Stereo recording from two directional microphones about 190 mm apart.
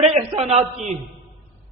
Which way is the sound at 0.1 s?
30° right (ahead or behind).